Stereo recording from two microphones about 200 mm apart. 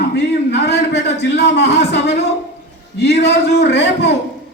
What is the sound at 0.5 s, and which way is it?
A man's voice, 55° left (ahead or behind).